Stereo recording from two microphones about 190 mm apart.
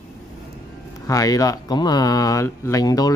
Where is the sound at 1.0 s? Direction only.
20° left (ahead or behind).